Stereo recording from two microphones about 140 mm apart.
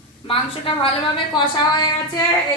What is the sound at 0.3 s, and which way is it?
A woman's voice, 40° left (ahead or behind).